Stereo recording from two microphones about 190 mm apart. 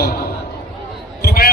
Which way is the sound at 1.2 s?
55° left (ahead or behind).